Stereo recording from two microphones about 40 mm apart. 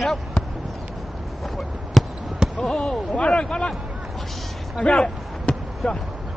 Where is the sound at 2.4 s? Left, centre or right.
Centre.